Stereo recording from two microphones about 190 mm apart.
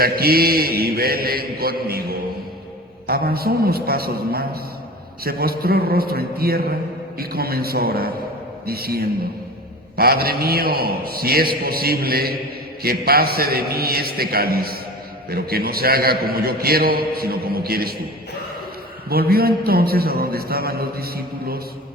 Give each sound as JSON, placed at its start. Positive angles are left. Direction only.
{"t": 0.0, "sound": "a man's voice", "side_deg": -55}
{"t": 19.0, "sound": "a man's voice", "side_deg": -55}